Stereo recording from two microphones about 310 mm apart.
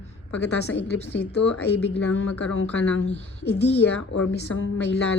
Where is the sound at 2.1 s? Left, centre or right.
Left.